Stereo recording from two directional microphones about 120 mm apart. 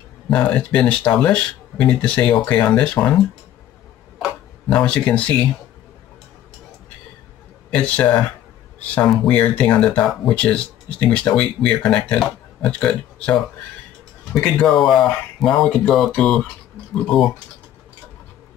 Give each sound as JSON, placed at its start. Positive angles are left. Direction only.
{"t": 0.3, "sound": "speech", "side_deg": 10}
{"t": 7.7, "sound": "speech", "side_deg": 10}
{"t": 14.4, "sound": "speech", "side_deg": 5}